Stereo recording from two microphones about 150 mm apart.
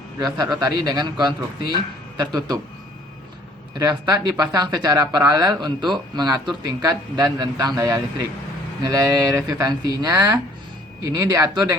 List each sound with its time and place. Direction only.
0.2 s speech: 25° right (ahead or behind)
3.8 s speech: 25° right (ahead or behind)